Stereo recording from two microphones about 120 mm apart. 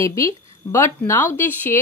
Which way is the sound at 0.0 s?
25° left (ahead or behind).